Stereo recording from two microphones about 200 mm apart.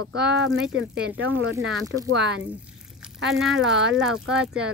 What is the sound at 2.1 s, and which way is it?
Speech, 65° right (ahead or behind).